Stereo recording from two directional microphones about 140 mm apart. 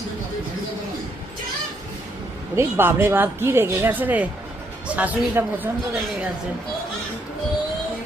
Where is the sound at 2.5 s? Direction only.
15° right (ahead or behind).